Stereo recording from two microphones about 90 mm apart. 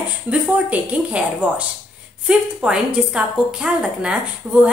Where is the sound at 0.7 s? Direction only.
15° right (ahead or behind).